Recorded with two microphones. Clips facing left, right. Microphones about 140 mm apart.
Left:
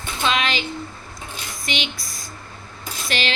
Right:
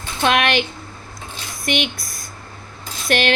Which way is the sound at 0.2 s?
60° right (ahead or behind).